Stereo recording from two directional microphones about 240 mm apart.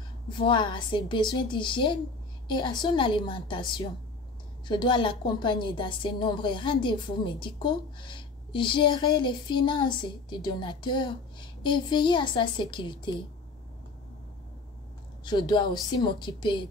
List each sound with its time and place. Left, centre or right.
0.3 s a woman's voice: centre
15.2 s a woman's voice: centre